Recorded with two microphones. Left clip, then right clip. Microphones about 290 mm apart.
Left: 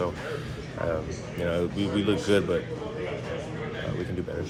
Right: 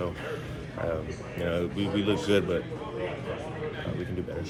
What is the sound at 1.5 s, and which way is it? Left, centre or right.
Speech, centre.